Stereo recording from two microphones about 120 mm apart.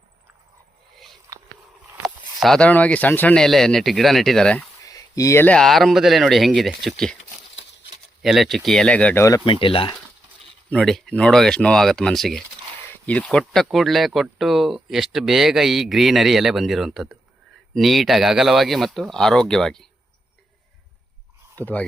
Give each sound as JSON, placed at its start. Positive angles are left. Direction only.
{"t": 2.4, "sound": "speech", "side_deg": 5}
{"t": 4.9, "sound": "a sound", "side_deg": 30}
{"t": 5.5, "sound": "speech", "side_deg": 5}
{"t": 8.2, "sound": "speech", "side_deg": 0}
{"t": 9.4, "sound": "speech", "side_deg": 45}
{"t": 10.7, "sound": "speech", "side_deg": 5}
{"t": 13.4, "sound": "speech", "side_deg": 0}
{"t": 21.6, "sound": "speech", "side_deg": 15}